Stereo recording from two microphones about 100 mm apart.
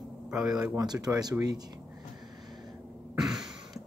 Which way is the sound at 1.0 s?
40° right (ahead or behind).